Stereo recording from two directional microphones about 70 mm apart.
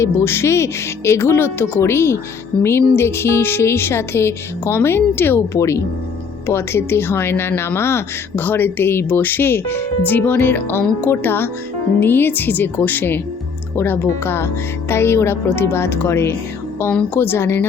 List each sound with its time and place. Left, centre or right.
0.0 s a woman's voice: left
5.5 s speech: left
6.5 s a woman's voice: left